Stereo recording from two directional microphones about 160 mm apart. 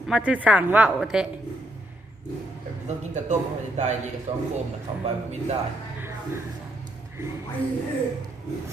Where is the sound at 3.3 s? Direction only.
45° right (ahead or behind).